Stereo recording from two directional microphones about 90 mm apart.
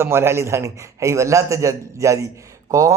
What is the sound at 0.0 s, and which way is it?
A man's voice, 30° right (ahead or behind).